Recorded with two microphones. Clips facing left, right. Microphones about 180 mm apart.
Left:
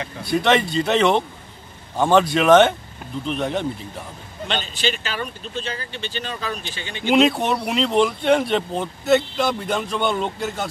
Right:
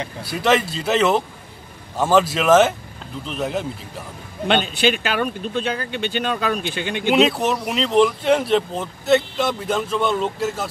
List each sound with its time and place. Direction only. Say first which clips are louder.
0.2 s speech: left 1 dB; 5° right (ahead or behind)
4.5 s speech: right 7 dB; 60° right (ahead or behind)
7.1 s speech: even; centre (ahead or behind)